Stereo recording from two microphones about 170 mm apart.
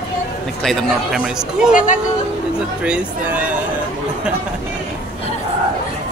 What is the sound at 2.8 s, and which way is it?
Speech, 5° right (ahead or behind).